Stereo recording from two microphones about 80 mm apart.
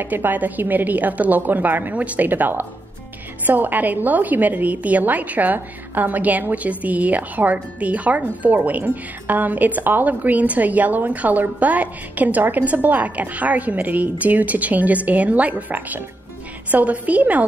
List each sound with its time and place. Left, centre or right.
0.0 s a woman's voice: right